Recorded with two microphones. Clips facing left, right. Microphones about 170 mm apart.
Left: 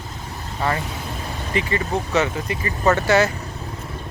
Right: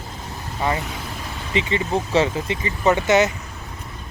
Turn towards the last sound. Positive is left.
turn(degrees=-20)  # may be behind; listen again after turning